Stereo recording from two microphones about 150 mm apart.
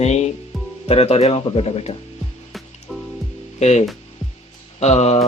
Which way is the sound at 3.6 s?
50° left (ahead or behind).